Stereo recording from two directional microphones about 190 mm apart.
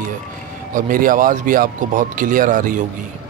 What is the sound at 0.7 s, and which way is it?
Speech, 45° right (ahead or behind).